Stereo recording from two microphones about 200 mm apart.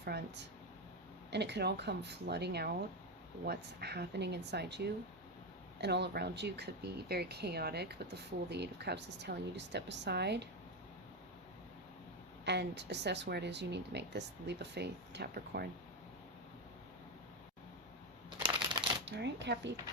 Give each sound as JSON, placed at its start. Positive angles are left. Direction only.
{"t": 0.0, "sound": "speech", "side_deg": -55}
{"t": 12.5, "sound": "speech", "side_deg": -60}
{"t": 19.0, "sound": "speech", "side_deg": -60}